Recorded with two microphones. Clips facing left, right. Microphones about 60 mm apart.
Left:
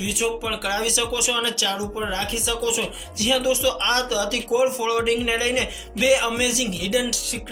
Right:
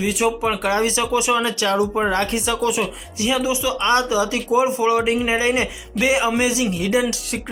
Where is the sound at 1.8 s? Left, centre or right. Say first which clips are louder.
Right 7 dB; right.